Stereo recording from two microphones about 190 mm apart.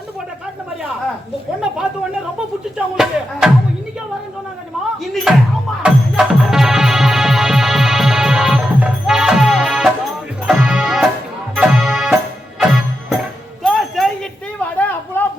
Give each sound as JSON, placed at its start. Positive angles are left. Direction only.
{"t": 2.7, "sound": "speech", "side_deg": 0}
{"t": 5.1, "sound": "music", "side_deg": 0}
{"t": 13.7, "sound": "a sound", "side_deg": 0}